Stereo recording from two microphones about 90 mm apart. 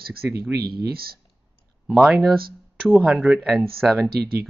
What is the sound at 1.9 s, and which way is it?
Speech, 5° right (ahead or behind).